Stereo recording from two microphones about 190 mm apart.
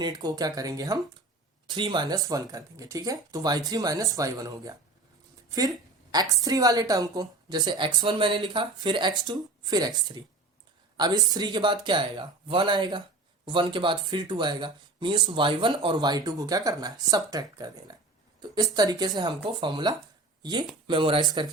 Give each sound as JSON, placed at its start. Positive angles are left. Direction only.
{"t": 0.0, "sound": "speech", "side_deg": -20}